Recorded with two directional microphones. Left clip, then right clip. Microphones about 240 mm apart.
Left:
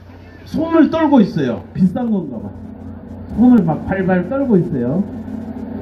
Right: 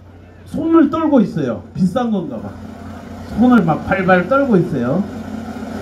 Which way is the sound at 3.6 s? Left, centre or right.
Right.